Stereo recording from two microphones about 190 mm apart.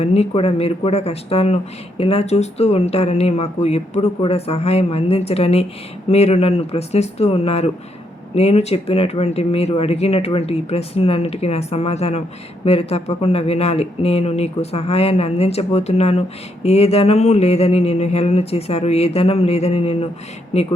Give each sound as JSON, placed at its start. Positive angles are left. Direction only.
{"t": 0.0, "sound": "speech", "side_deg": 35}